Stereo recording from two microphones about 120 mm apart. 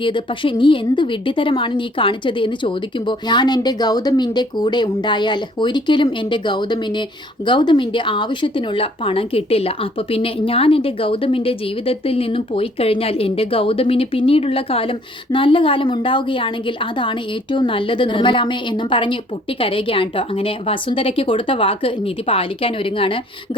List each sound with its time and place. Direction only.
0.0 s a woman's voice: 45° left (ahead or behind)